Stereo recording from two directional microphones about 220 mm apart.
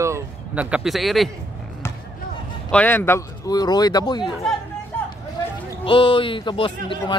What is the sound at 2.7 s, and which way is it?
Speech, 10° left (ahead or behind).